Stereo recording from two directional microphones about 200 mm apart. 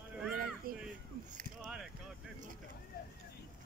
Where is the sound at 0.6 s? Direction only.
45° right (ahead or behind).